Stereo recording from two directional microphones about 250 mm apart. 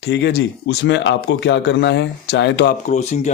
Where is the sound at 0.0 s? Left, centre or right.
Left.